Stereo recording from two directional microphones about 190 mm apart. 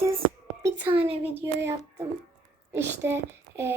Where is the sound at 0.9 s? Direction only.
30° right (ahead or behind).